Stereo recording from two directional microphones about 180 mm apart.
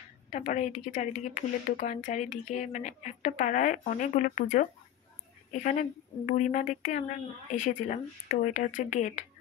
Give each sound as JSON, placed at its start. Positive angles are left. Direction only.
{"t": 0.3, "sound": "speech", "side_deg": 45}